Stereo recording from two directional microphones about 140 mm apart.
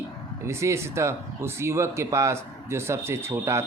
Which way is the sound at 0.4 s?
20° right (ahead or behind).